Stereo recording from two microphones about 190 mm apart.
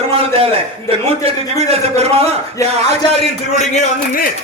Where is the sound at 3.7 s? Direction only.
45° left (ahead or behind).